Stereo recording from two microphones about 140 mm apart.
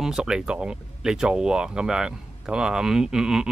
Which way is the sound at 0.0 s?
5° right (ahead or behind).